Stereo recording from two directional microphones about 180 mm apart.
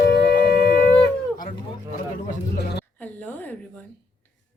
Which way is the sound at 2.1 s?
65° left (ahead or behind).